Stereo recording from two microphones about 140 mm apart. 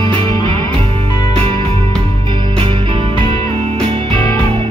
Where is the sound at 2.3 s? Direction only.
40° right (ahead or behind).